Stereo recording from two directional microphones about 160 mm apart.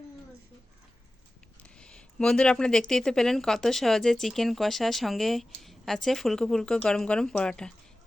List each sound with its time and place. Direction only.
1.6 s speech: 5° left (ahead or behind)